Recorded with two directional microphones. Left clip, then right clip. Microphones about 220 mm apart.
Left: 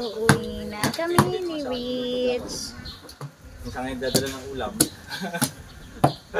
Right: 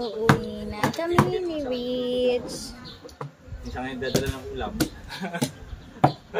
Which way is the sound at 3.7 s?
25° right (ahead or behind).